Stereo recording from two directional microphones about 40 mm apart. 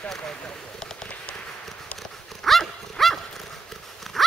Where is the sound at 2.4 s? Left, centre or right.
Centre.